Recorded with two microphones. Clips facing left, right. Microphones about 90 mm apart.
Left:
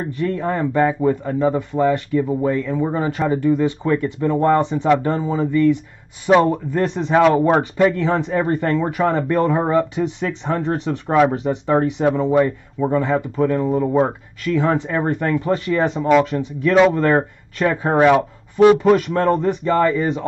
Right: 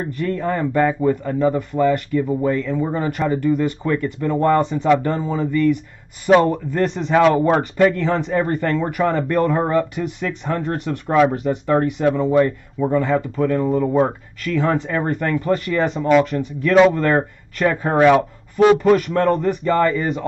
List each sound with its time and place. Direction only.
0.2 s speech: 15° left (ahead or behind)